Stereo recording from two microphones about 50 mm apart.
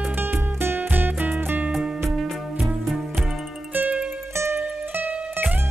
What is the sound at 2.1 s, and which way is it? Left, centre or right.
Music, centre.